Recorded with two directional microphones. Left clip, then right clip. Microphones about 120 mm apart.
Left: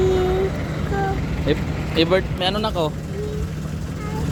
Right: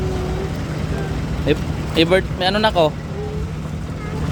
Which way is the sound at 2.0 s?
55° right (ahead or behind).